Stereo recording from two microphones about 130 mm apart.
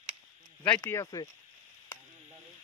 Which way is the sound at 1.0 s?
30° left (ahead or behind).